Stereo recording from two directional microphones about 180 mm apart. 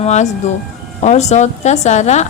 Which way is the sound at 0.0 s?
40° left (ahead or behind).